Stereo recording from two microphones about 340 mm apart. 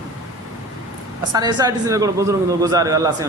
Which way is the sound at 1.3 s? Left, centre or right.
Centre.